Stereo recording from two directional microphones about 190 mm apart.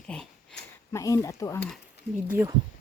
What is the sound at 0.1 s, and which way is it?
Speech, 5° left (ahead or behind).